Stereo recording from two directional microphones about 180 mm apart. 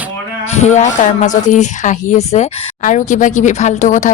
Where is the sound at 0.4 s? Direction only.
40° left (ahead or behind).